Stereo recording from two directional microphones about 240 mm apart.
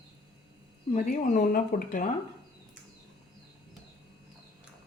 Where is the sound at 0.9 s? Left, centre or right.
Left.